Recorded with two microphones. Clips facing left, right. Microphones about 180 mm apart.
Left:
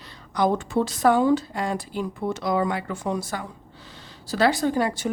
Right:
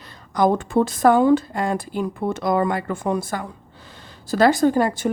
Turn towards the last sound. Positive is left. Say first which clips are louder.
# right 5 dB
turn(degrees=-50)  # may be behind; listen again after turning